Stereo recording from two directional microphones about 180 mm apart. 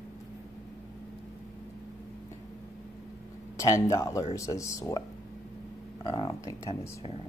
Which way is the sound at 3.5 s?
15° left (ahead or behind).